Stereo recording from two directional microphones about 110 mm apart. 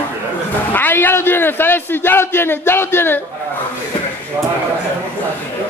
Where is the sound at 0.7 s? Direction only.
20° left (ahead or behind).